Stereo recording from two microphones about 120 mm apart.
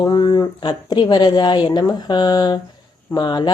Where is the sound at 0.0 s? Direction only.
35° left (ahead or behind).